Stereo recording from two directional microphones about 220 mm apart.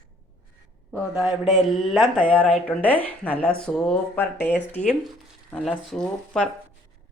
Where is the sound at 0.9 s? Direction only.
5° right (ahead or behind).